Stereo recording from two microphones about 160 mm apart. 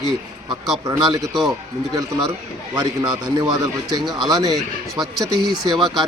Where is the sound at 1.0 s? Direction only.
20° right (ahead or behind).